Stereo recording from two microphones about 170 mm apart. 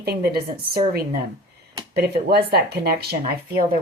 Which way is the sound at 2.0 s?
70° right (ahead or behind).